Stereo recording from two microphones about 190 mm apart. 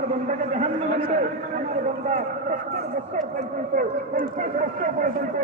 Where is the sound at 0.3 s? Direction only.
35° right (ahead or behind).